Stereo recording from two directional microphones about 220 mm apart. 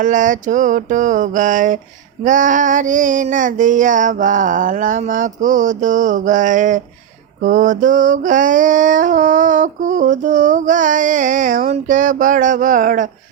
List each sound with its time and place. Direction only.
0.0 s mantra: 35° right (ahead or behind)